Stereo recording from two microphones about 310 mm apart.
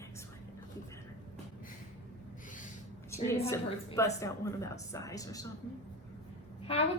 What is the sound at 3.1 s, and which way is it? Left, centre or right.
A woman's voice, centre.